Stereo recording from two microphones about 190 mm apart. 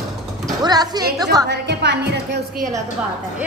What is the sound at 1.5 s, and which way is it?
Speech, 65° right (ahead or behind).